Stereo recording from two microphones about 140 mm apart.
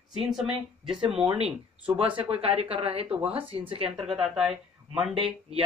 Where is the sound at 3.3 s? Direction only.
40° right (ahead or behind).